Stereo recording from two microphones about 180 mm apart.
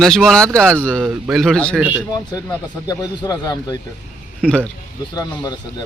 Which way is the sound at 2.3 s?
20° left (ahead or behind).